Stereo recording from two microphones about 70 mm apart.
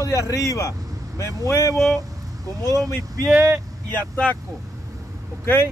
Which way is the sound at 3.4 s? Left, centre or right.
Right.